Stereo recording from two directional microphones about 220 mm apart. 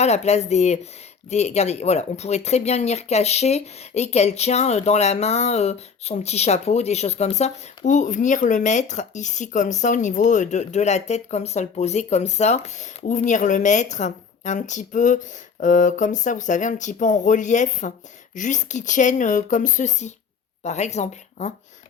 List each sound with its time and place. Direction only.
0.0 s speech: 30° left (ahead or behind)